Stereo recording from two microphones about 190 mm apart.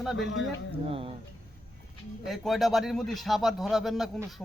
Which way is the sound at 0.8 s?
30° right (ahead or behind).